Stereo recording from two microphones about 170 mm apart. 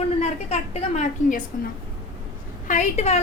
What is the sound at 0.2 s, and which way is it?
A woman's voice, 40° left (ahead or behind).